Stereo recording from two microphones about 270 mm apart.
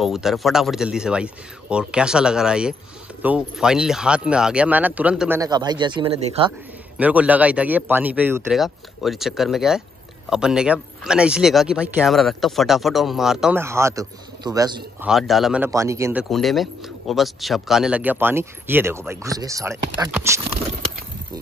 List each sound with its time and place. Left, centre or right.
0.0 s speech: centre
5.4 s speech: centre
7.0 s speech: centre
15.0 s speech: centre